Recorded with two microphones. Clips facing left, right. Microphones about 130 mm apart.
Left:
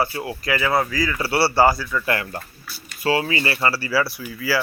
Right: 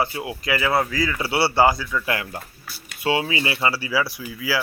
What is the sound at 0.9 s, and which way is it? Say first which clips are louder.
Speech: left 1 dB; 25° right (ahead or behind).